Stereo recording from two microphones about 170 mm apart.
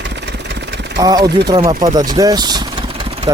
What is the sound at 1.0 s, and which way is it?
Speech, 25° right (ahead or behind).